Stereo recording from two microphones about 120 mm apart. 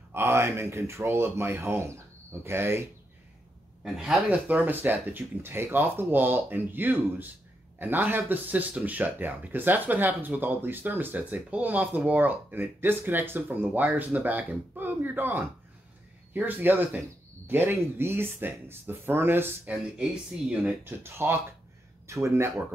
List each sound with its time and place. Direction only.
0.1 s speech: 20° right (ahead or behind)
3.8 s speech: 5° right (ahead or behind); by 22.5 s 25° right (ahead or behind)